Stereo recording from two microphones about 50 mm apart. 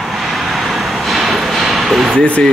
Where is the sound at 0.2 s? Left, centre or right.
Centre.